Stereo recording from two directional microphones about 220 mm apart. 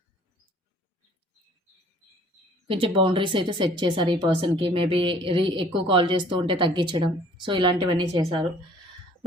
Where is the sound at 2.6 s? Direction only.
25° right (ahead or behind).